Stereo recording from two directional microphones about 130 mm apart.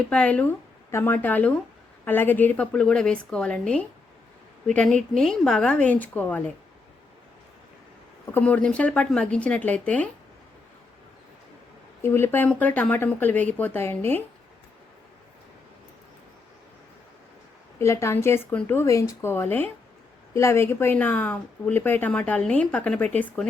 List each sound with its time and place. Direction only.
0.1 s speech: 10° left (ahead or behind)
8.3 s speech: 15° left (ahead or behind)
12.0 s speech: 20° left (ahead or behind)
17.7 s speech: 20° left (ahead or behind); by 23.5 s 5° left (ahead or behind)